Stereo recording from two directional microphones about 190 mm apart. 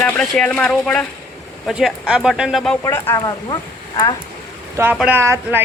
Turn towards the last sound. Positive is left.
turn(degrees=-15)  # may be behind; listen again after turning